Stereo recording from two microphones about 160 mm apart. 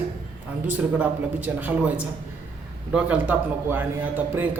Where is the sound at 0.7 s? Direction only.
10° right (ahead or behind).